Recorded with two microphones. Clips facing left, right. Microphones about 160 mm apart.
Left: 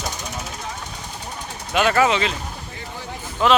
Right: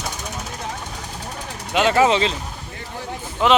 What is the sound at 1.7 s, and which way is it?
Speech, 20° right (ahead or behind).